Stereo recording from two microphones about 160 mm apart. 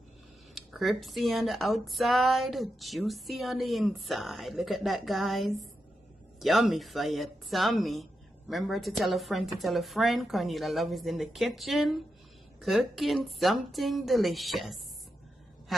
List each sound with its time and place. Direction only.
0.5 s speech: centre (ahead or behind)